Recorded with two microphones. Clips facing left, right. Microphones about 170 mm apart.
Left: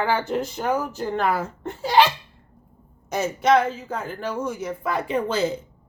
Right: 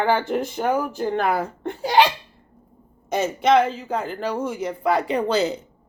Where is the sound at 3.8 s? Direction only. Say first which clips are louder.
Right 4 dB; 65° right (ahead or behind); by 5.2 s 80° right.